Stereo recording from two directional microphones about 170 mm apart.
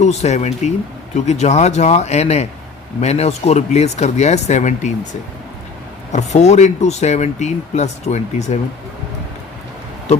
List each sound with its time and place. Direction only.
0.0 s speech: 40° left (ahead or behind)
6.1 s speech: 40° left (ahead or behind)